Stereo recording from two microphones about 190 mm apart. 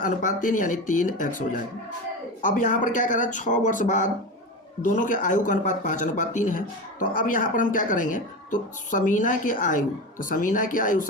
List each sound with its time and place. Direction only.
0.3 s speech: 45° left (ahead or behind)